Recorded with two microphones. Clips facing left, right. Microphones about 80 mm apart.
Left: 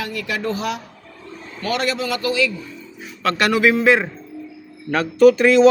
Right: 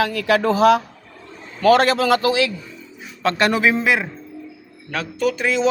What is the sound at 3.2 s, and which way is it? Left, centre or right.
Speech, right.